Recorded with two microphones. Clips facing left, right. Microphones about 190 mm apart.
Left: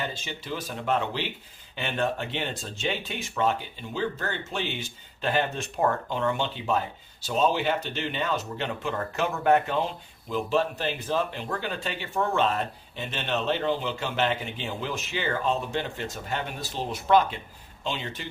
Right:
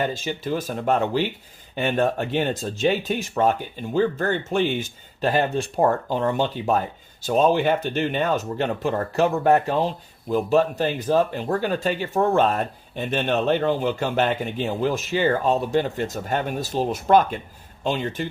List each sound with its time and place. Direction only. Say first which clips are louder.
0.0 s speech: right 9 dB; 45° right (ahead or behind)